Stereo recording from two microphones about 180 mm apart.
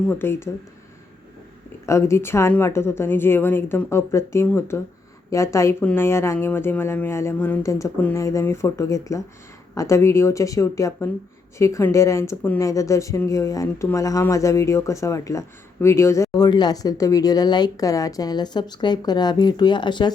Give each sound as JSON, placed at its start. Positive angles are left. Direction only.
{"t": 0.1, "sound": "speech", "side_deg": 15}
{"t": 1.9, "sound": "speech", "side_deg": 15}